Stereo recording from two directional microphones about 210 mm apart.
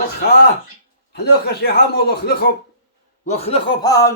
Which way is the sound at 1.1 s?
50° left (ahead or behind).